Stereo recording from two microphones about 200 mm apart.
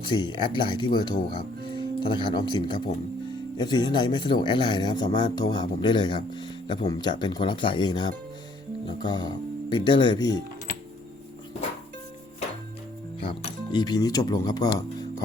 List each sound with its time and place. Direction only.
0.0 s speech: 25° left (ahead or behind)
13.1 s speech: 25° left (ahead or behind)